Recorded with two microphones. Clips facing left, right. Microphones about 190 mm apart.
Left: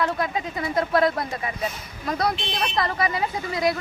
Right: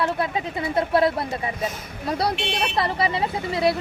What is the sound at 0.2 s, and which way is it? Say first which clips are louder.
Speech: right 1 dB; 25° right (ahead or behind).